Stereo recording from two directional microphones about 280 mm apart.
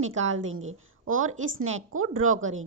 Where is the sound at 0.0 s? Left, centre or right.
Right.